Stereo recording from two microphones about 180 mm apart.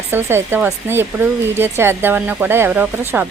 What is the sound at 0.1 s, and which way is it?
A woman's voice, 15° right (ahead or behind).